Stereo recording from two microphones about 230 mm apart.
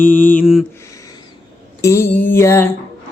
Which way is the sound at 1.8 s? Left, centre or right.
Centre.